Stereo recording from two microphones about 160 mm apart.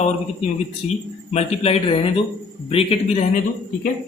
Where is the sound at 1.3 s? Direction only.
40° left (ahead or behind).